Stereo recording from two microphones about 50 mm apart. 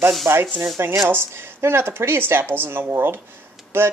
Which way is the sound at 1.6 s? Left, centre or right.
Right.